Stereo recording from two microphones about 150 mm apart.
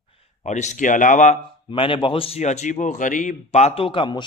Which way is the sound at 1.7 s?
35° left (ahead or behind).